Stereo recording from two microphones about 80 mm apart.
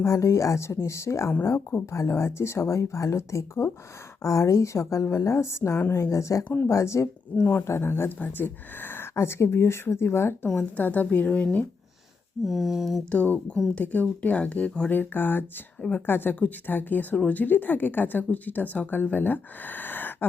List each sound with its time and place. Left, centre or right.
0.0 s speech: left
10.8 s speech: left
12.5 s a sound: centre
13.1 s speech: centre